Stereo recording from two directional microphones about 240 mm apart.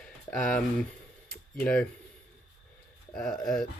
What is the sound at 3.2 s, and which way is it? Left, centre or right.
Speech, centre.